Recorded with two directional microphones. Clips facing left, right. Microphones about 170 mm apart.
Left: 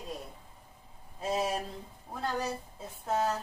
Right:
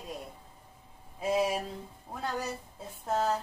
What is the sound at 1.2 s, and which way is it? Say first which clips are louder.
Speech: right 3 dB; 10° right (ahead or behind).